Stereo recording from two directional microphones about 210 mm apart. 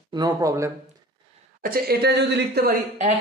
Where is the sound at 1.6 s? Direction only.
45° right (ahead or behind).